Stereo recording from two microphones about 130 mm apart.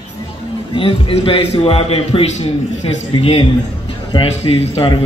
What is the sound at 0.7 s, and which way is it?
A man's voice, 45° left (ahead or behind).